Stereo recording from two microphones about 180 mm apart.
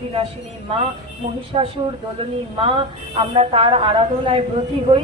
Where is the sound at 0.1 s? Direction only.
30° right (ahead or behind).